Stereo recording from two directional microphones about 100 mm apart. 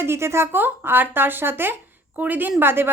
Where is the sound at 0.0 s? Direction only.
25° right (ahead or behind).